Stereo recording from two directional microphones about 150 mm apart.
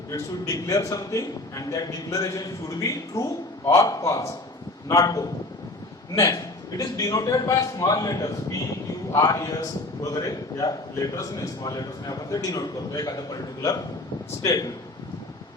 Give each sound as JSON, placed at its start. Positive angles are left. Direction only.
{"t": 0.1, "sound": "a man's voice", "side_deg": 20}